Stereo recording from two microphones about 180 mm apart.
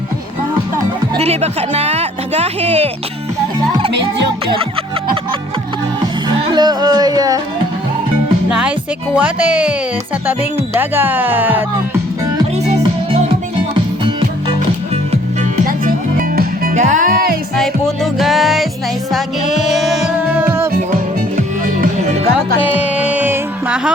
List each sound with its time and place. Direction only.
1.1 s speech: 35° right (ahead or behind)
6.2 s music: 25° right (ahead or behind)
8.4 s speech: 5° right (ahead or behind)
10.8 s speech: 10° right (ahead or behind)
15.1 s music: 45° right (ahead or behind)
17.6 s music: centre (ahead or behind)
21.3 s music: 40° right (ahead or behind)
22.6 s music: 10° right (ahead or behind)